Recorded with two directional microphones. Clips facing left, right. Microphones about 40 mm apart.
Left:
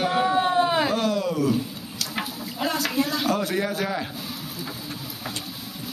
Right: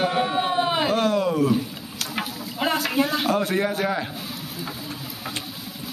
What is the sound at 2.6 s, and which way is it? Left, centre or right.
A man's voice, right.